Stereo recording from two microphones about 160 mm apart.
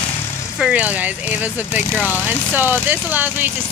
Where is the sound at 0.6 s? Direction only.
10° right (ahead or behind).